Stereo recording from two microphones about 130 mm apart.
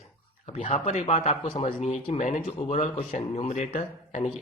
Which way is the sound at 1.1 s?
60° left (ahead or behind).